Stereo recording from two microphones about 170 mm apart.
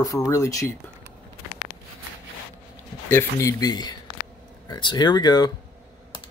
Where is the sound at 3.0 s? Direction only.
15° left (ahead or behind).